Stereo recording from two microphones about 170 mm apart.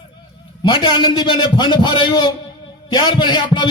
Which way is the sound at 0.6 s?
25° left (ahead or behind).